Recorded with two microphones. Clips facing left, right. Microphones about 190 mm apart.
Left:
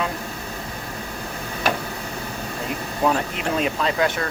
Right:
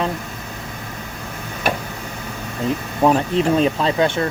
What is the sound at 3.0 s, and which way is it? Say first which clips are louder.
Speech: right 6 dB; 30° right (ahead or behind).